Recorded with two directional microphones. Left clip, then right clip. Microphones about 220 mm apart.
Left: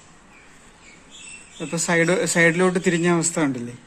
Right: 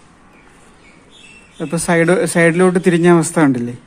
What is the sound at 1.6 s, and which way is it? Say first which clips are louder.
A man's voice: right 6 dB; 15° right (ahead or behind).